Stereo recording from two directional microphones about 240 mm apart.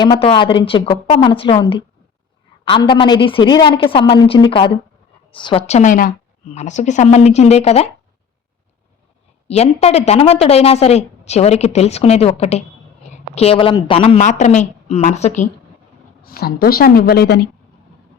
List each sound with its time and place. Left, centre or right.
0.0 s a woman's voice: left
9.5 s a woman's voice: left